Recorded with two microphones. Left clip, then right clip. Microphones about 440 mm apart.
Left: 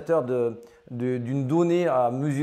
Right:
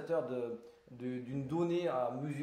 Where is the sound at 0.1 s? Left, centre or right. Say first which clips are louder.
Left 11 dB; left.